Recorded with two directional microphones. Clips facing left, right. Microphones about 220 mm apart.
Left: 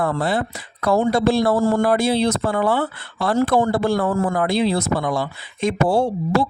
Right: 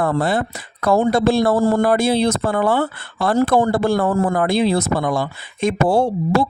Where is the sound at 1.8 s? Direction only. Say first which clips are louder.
Right 2 dB; 50° right (ahead or behind).